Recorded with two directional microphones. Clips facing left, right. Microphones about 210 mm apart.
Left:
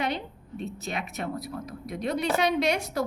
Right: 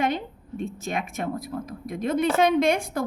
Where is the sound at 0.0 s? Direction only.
50° right (ahead or behind).